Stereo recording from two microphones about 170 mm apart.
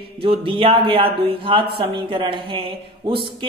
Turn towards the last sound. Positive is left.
turn(degrees=-30)  # may be behind; listen again after turning